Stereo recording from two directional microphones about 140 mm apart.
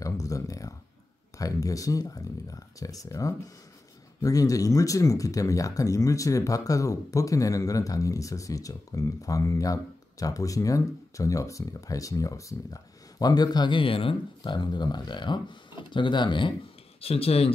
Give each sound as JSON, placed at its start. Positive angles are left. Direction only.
{"t": 0.0, "sound": "a sound", "side_deg": 25}
{"t": 1.4, "sound": "speech", "side_deg": 25}
{"t": 17.0, "sound": "speech", "side_deg": 45}